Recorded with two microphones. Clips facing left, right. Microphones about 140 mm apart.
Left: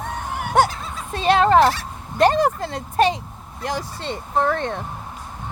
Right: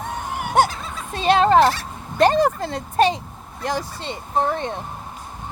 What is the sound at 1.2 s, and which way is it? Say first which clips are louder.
Fowl: even; 25° right (ahead or behind).